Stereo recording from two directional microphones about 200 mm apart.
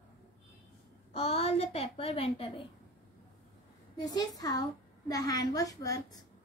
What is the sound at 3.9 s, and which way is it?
A woman's voice, 20° left (ahead or behind).